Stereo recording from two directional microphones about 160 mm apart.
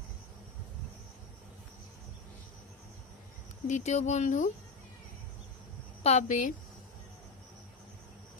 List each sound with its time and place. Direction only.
3.6 s speech: 45° left (ahead or behind)
6.0 s speech: 50° left (ahead or behind)